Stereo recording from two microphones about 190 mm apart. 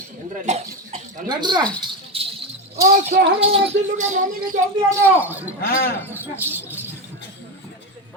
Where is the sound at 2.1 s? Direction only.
30° right (ahead or behind).